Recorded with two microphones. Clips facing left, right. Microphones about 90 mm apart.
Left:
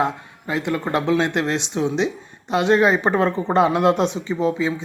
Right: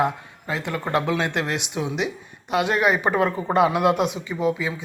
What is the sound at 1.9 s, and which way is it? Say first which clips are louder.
Speech: left 4 dB; 25° left (ahead or behind).